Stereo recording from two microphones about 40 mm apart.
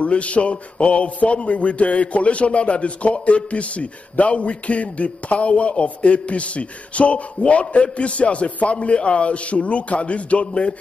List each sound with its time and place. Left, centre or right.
0.0 s a man's voice: left